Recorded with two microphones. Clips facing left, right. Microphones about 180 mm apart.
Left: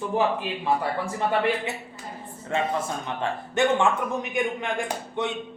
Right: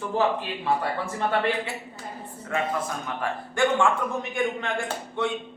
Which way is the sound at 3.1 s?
20° left (ahead or behind).